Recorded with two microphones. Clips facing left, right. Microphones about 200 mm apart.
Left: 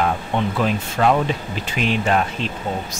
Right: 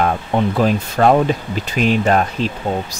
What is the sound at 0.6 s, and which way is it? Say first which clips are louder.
Speech: right 5 dB; 40° right (ahead or behind).